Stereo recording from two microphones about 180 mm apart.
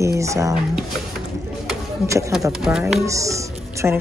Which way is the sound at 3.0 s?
15° right (ahead or behind).